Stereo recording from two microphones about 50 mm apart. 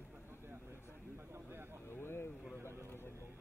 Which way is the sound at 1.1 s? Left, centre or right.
Right.